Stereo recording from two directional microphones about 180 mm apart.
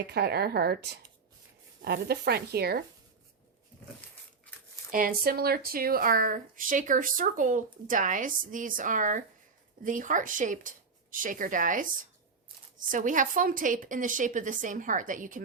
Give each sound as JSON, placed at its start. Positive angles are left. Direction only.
{"t": 0.1, "sound": "speech", "side_deg": -60}
{"t": 4.9, "sound": "speech", "side_deg": -50}
{"t": 12.9, "sound": "speech", "side_deg": -45}